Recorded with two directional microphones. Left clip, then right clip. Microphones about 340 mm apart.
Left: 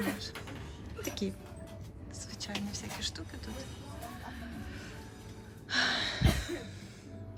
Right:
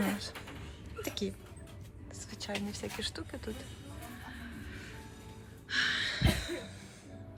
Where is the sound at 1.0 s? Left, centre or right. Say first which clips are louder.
Even; centre.